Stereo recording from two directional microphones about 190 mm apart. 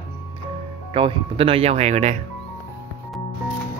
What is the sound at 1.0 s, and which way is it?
Speech, 30° right (ahead or behind).